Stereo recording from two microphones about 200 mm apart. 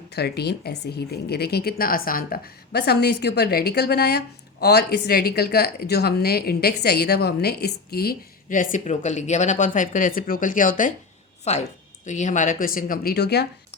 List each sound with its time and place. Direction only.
0.1 s speech: 55° left (ahead or behind)